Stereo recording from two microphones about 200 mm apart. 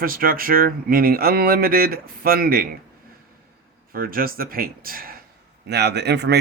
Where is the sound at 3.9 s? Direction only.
45° right (ahead or behind).